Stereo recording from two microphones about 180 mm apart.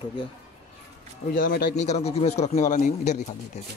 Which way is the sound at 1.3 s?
50° left (ahead or behind).